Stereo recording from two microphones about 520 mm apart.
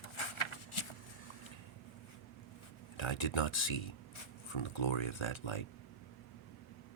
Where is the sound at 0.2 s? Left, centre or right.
Left.